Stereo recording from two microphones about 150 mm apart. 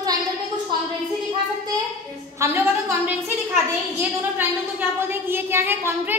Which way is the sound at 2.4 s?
15° right (ahead or behind).